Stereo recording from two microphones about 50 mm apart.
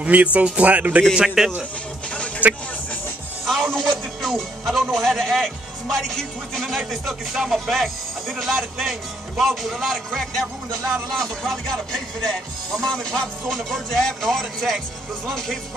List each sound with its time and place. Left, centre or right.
0.0 s speech: right
1.1 s a man's voice: centre
2.4 s speech: right
3.4 s music: centre
4.9 s speech: centre
6.5 s speech: centre